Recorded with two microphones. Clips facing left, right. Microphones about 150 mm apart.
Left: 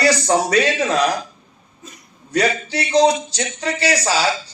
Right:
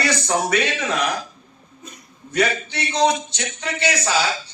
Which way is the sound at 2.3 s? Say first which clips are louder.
Left 2 dB; 35° left (ahead or behind).